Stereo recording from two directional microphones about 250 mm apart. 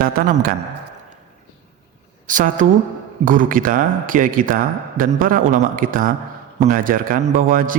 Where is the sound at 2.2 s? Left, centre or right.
Right.